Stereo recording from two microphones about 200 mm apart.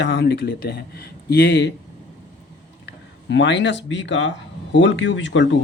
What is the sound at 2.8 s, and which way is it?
Speech, 65° left (ahead or behind).